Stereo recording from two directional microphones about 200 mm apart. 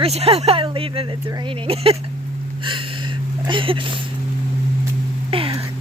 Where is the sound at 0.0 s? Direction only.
30° right (ahead or behind).